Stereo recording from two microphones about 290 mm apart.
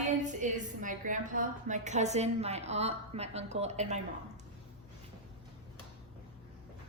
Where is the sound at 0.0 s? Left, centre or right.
Right.